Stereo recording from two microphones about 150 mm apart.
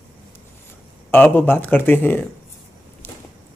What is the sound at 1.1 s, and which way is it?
Speech, 10° left (ahead or behind).